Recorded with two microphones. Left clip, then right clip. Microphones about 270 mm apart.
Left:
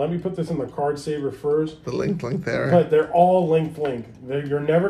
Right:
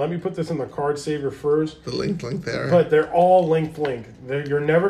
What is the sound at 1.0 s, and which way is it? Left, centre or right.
Speech, right.